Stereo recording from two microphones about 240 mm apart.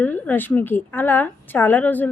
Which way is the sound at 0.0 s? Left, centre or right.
Centre.